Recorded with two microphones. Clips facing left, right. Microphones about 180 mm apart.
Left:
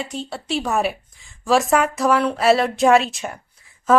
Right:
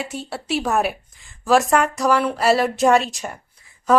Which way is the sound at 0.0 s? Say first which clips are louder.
Even; 5° right (ahead or behind).